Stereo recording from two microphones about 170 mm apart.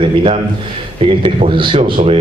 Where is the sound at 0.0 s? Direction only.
30° right (ahead or behind).